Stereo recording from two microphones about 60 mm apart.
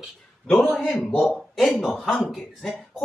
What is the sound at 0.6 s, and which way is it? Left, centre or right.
Speech, left.